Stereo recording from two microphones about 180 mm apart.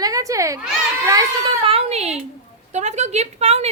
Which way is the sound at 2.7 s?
40° right (ahead or behind).